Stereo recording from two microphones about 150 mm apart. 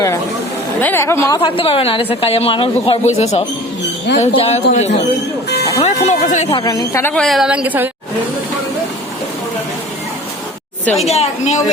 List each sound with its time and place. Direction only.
0.8 s a woman's voice: 15° left (ahead or behind)
1.4 s a woman's voice: 35° left (ahead or behind)
6.5 s speech: 25° left (ahead or behind)
7.1 s a woman's voice: centre (ahead or behind)
11.0 s speech: 45° left (ahead or behind)